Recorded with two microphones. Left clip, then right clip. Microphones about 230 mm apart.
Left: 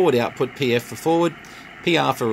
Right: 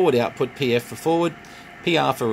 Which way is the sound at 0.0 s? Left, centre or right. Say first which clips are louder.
Left 1 dB; centre.